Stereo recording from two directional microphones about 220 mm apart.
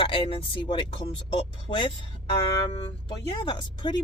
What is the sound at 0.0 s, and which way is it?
Speech, 25° left (ahead or behind).